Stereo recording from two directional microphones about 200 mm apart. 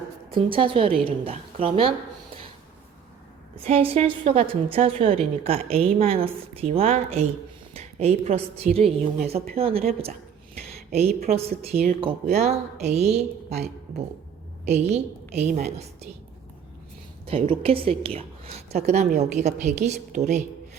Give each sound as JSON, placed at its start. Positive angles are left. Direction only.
{"t": 0.3, "sound": "a woman's voice", "side_deg": -25}
{"t": 3.5, "sound": "a woman's voice", "side_deg": -30}
{"t": 11.3, "sound": "a woman's voice", "side_deg": -30}
{"t": 14.7, "sound": "a woman's voice", "side_deg": -35}
{"t": 17.2, "sound": "a woman's voice", "side_deg": -25}